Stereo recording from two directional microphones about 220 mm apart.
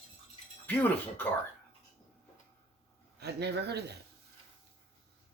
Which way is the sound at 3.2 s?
50° right (ahead or behind).